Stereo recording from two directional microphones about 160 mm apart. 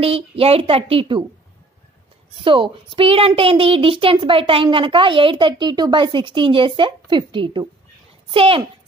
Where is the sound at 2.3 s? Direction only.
30° right (ahead or behind).